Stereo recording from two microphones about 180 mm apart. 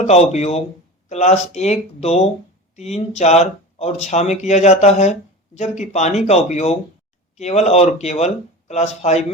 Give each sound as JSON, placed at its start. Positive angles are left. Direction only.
{"t": 0.0, "sound": "speech", "side_deg": 40}